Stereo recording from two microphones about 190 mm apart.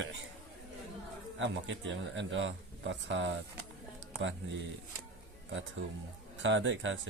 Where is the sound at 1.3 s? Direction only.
70° right (ahead or behind).